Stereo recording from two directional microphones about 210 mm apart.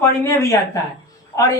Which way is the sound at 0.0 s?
15° left (ahead or behind).